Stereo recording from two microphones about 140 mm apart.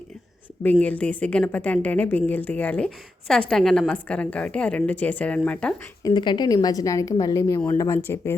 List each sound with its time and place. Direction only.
0.6 s a woman's voice: 10° left (ahead or behind)
6.0 s a woman's voice: 30° left (ahead or behind)